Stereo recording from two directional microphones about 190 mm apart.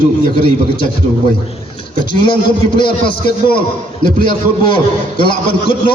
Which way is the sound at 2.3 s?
25° left (ahead or behind).